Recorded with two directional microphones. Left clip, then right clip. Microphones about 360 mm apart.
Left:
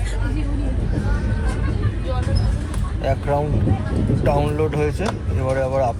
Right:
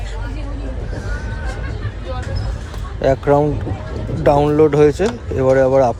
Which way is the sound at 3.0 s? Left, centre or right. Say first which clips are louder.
Right 8 dB; right.